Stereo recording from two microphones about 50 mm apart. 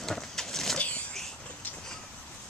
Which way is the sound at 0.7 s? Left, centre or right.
Left.